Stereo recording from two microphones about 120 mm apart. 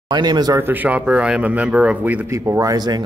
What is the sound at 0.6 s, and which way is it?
Speech, 15° right (ahead or behind).